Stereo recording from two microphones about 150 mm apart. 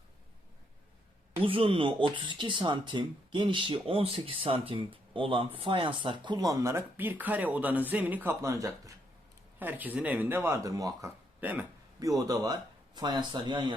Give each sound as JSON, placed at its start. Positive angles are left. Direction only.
{"t": 1.4, "sound": "speech", "side_deg": -35}
{"t": 11.3, "sound": "speech", "side_deg": -10}
{"t": 11.9, "sound": "speech", "side_deg": -25}